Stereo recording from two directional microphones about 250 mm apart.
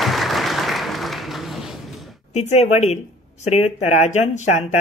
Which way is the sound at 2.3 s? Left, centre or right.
Left.